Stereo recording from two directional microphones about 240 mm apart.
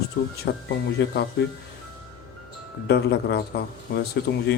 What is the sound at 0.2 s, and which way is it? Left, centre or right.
Speech, left.